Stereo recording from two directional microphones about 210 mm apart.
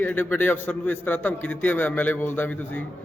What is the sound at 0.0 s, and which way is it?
A man's voice, 10° left (ahead or behind).